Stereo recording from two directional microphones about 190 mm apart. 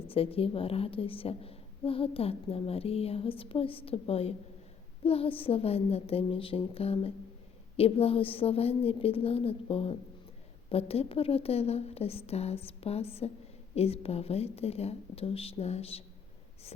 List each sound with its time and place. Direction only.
0.1 s a woman's voice: 30° left (ahead or behind)